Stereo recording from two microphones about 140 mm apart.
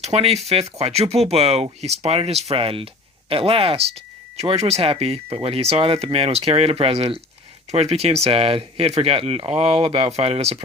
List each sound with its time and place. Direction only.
0.0 s speech: 45° right (ahead or behind)